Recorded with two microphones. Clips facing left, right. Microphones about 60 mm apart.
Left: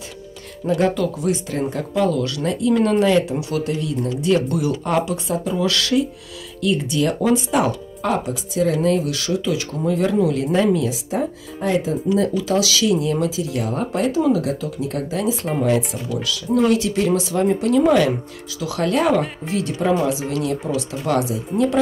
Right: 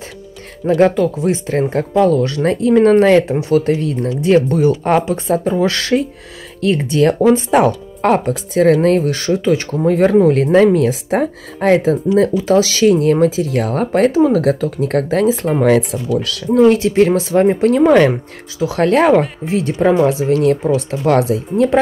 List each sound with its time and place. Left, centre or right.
0.7 s speech: right
9.0 s speech: right
10.4 s speech: right
12.1 s speech: right
14.1 s speech: right
15.6 s speech: right
16.5 s speech: right
19.4 s speech: right